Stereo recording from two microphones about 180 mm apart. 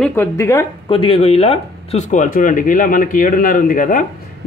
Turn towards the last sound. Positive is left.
turn(degrees=45)  # may be behind; listen again after turning